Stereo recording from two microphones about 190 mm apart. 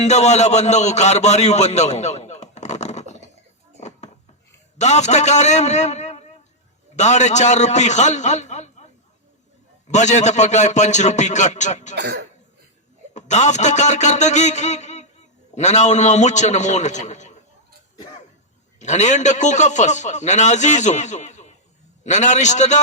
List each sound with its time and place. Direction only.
0.0 s a man's voice: 35° left (ahead or behind)
3.8 s a sound: 35° left (ahead or behind)
4.8 s a man's voice: 35° left (ahead or behind)
9.9 s a man's voice: 40° left (ahead or behind)
11.9 s speech: 60° right (ahead or behind)
13.1 s a sound: 40° left (ahead or behind)
15.5 s a man's voice: 35° left (ahead or behind)
18.8 s a man's voice: 40° left (ahead or behind)